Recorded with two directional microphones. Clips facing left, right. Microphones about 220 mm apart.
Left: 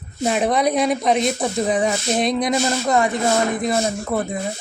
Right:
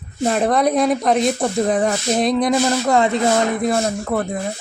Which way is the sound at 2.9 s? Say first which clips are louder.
Right 2 dB; 20° right (ahead or behind).